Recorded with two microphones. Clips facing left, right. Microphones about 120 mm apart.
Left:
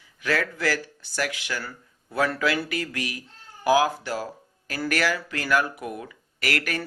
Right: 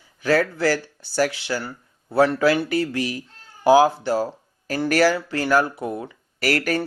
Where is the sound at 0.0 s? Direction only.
30° right (ahead or behind).